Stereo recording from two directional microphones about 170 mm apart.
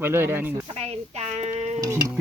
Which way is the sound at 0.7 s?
40° right (ahead or behind).